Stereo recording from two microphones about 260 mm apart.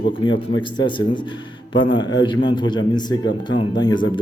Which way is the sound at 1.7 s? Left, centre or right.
Centre.